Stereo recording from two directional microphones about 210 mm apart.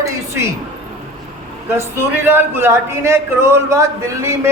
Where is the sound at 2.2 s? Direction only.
10° right (ahead or behind).